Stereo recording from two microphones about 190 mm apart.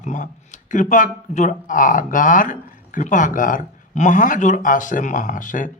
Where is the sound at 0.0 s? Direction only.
40° left (ahead or behind).